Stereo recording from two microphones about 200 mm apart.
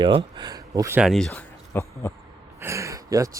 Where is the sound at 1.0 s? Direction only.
Centre (ahead or behind).